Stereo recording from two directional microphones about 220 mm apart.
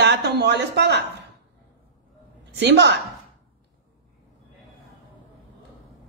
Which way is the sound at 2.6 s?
50° right (ahead or behind).